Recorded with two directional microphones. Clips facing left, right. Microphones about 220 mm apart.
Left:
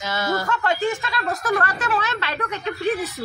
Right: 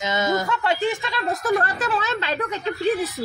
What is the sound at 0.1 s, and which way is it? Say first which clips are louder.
Speech: right 1 dB; 20° right (ahead or behind).